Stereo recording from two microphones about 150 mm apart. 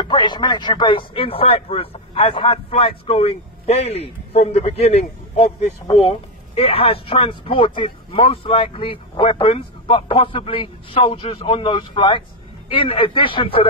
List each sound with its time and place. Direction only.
0.0 s speech: 30° left (ahead or behind)